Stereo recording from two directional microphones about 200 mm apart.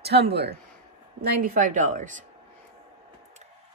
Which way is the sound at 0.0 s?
55° right (ahead or behind).